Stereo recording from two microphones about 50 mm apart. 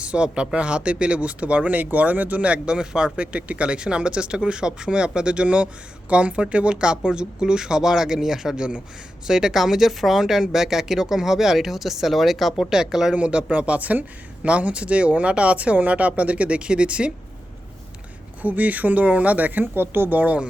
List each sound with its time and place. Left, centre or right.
0.0 s speech: right
13.1 s speech: right
18.4 s speech: right
20.1 s speech: right